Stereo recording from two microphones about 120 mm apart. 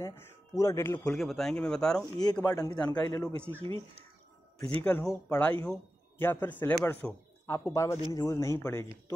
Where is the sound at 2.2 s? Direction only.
35° left (ahead or behind).